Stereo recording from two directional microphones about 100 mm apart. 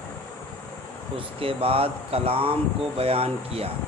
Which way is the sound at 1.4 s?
70° right (ahead or behind).